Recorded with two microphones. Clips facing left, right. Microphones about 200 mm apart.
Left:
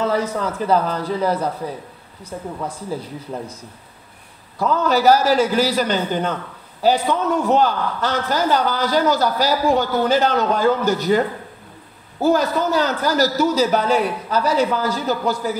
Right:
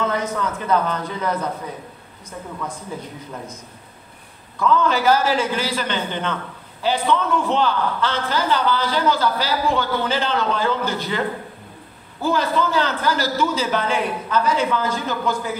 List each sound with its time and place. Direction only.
0.0 s a man's voice: 35° left (ahead or behind)
4.6 s a man's voice: 40° left (ahead or behind)